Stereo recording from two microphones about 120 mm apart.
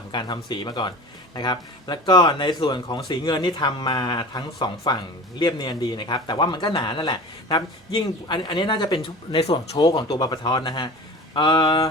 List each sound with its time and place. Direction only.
0.1 s speech: 40° left (ahead or behind)